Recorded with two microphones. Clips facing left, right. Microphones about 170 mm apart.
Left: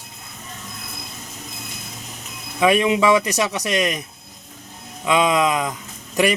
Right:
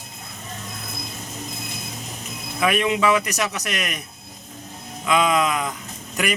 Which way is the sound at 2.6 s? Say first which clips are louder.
Left 4 dB; 20° left (ahead or behind).